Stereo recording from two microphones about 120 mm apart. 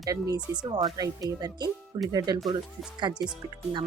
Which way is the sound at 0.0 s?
30° right (ahead or behind).